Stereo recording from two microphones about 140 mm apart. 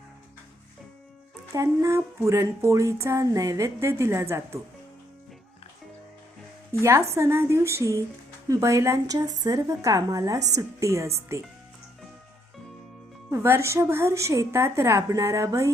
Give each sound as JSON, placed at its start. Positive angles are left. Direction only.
{"t": 1.5, "sound": "speech", "side_deg": -20}
{"t": 6.8, "sound": "speech", "side_deg": -20}
{"t": 13.3, "sound": "speech", "side_deg": -20}